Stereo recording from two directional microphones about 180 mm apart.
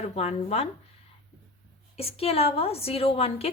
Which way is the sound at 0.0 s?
35° left (ahead or behind).